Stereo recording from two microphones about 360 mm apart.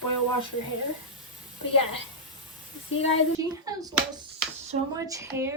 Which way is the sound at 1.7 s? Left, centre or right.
Left.